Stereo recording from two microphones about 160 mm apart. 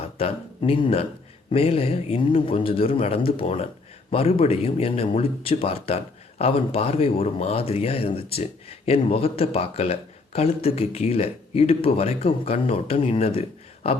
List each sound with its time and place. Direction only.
0.2 s speech: 35° left (ahead or behind)